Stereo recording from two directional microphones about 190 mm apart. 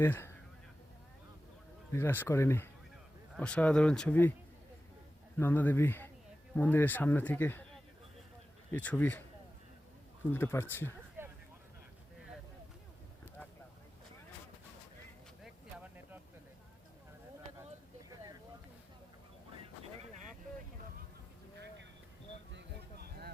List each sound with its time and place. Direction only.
0.0 s speech: 10° left (ahead or behind)
1.9 s speech: 10° left (ahead or behind)
5.4 s speech: 10° left (ahead or behind)
10.3 s speech: 10° left (ahead or behind)
11.2 s vehicle: 10° right (ahead or behind)
15.4 s a sound: 10° right (ahead or behind)
22.5 s a sound: 55° right (ahead or behind)